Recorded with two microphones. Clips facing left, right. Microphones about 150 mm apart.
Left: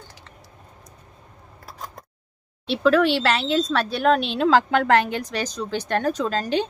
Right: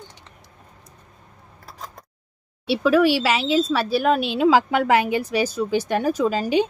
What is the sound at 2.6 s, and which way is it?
Speech, 10° right (ahead or behind).